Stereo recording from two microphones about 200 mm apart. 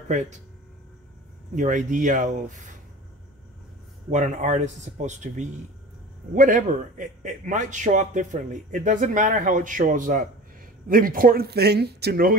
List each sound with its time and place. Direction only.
0.1 s a man's voice: 35° right (ahead or behind)
1.5 s a man's voice: 40° right (ahead or behind)
4.1 s a man's voice: 35° right (ahead or behind)